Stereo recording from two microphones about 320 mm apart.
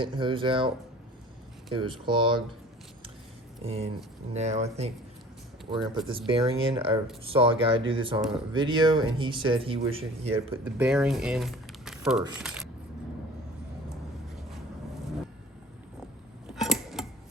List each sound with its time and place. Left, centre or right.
0.0 s speech: centre
1.7 s speech: centre
3.6 s speech: centre
10.8 s speech: centre
16.6 s a sound: centre